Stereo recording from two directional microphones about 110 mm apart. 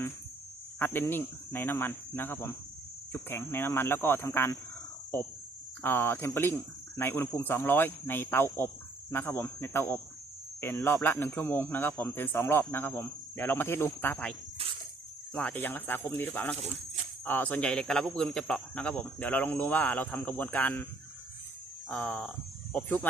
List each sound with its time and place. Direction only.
0.8 s speech: 20° left (ahead or behind)
5.8 s speech: 20° left (ahead or behind)
15.4 s speech: 15° left (ahead or behind)
21.8 s speech: 15° left (ahead or behind)